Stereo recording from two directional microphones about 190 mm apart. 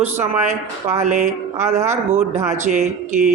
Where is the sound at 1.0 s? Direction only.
40° right (ahead or behind).